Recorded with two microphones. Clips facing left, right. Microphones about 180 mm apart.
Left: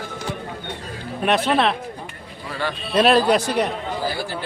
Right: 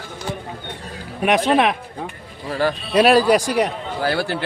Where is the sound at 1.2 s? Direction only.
15° right (ahead or behind).